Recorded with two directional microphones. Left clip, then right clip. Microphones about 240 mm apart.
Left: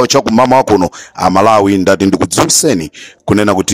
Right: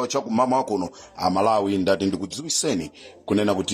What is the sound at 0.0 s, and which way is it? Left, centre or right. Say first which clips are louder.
Speech: left 13 dB; left.